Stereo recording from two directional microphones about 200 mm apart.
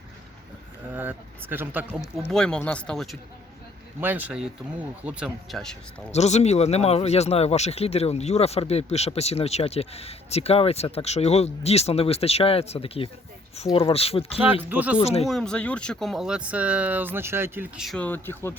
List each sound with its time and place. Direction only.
0.9 s speech: 10° right (ahead or behind)
2.2 s speech: 5° left (ahead or behind)
4.0 s speech: 10° right (ahead or behind)
6.1 s speech: 35° left (ahead or behind)
14.4 s speech: 10° right (ahead or behind)
15.0 s speech: 30° left (ahead or behind)
15.3 s speech: 5° left (ahead or behind)